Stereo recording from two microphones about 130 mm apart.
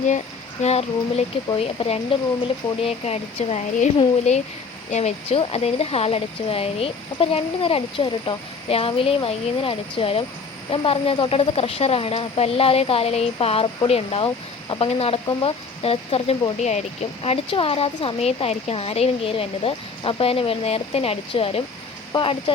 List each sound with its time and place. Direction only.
0.6 s speech: 55° left (ahead or behind)
16.6 s speech: 65° left (ahead or behind)
17.2 s speech: 45° left (ahead or behind)